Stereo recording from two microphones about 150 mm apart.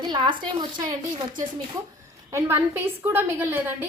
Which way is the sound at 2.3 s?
15° right (ahead or behind).